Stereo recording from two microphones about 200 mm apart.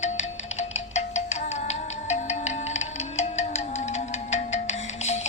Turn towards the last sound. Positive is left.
turn(degrees=35)  # may be behind; listen again after turning